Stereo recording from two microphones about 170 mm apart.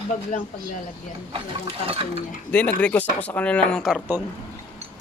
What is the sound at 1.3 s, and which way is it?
Speech, 35° right (ahead or behind).